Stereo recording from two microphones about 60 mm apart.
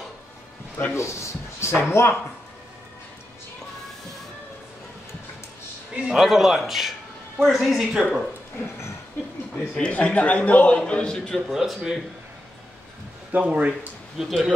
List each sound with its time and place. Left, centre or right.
0.9 s a sound: left
1.8 s speech: left
5.9 s a man's voice: centre
6.2 s a man's voice: centre
8.0 s a man's voice: centre
9.8 s a man's voice: left
11.5 s a man's voice: centre
13.3 s speech: right
14.1 s a man's voice: centre